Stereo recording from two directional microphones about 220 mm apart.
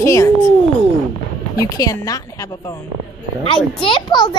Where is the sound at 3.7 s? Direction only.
20° left (ahead or behind).